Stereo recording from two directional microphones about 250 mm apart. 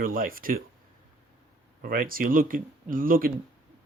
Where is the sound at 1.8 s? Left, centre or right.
Right.